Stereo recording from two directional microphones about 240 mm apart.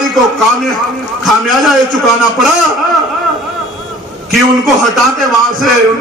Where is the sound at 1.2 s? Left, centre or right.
Centre.